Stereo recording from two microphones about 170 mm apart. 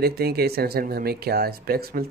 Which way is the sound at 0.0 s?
65° right (ahead or behind).